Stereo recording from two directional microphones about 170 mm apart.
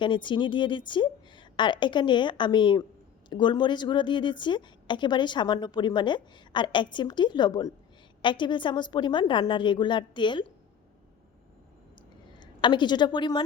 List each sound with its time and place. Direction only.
0.0 s a woman's voice: 30° left (ahead or behind)
12.4 s a woman's voice: 25° left (ahead or behind)